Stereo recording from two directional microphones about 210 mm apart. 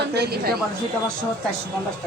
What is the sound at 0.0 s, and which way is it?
Speech, 50° right (ahead or behind).